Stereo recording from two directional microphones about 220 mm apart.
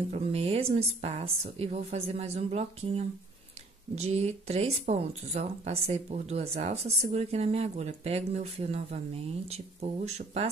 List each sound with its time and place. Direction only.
0.1 s speech: 30° right (ahead or behind)